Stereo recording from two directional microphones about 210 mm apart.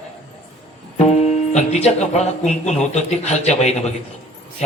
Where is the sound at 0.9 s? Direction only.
30° left (ahead or behind).